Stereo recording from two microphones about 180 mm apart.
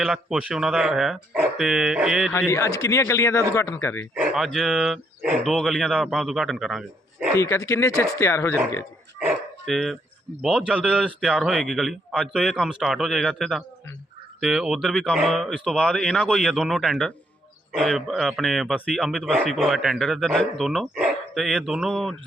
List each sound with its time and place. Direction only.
0.0 s a man's voice: 5° right (ahead or behind)
2.5 s a man's voice: 15° left (ahead or behind)
4.1 s a man's voice: 5° right (ahead or behind)
7.3 s a man's voice: 15° left (ahead or behind)
9.1 s dog: 10° right (ahead or behind)
9.6 s a man's voice: centre (ahead or behind)